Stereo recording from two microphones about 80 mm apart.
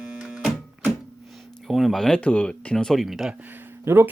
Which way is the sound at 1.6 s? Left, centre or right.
Centre.